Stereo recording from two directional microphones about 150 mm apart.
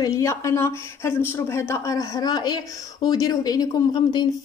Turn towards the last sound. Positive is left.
turn(degrees=30)  # may be behind; listen again after turning